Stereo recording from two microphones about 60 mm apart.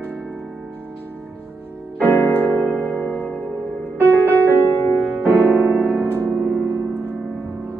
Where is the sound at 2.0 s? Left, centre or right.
Left.